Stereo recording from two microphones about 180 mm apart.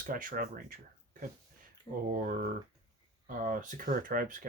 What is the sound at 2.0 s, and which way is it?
Speech, 50° right (ahead or behind).